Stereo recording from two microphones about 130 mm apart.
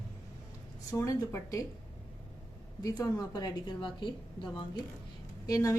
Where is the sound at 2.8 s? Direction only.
30° left (ahead or behind).